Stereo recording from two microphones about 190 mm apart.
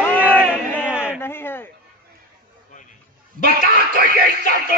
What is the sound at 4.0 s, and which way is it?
Music, 50° right (ahead or behind).